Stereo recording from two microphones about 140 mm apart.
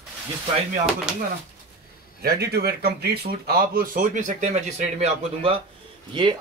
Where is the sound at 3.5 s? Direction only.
90° right; by 5.6 s 45° right (ahead or behind).